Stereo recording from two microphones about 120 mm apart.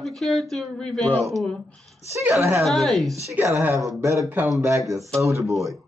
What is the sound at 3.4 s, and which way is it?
Speech, 20° right (ahead or behind).